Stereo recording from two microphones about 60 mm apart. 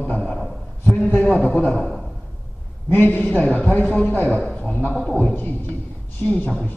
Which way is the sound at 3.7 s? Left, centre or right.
Left.